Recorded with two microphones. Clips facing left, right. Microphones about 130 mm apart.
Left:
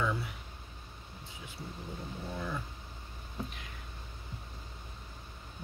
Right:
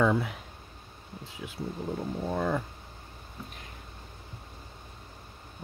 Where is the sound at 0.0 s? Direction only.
90° right.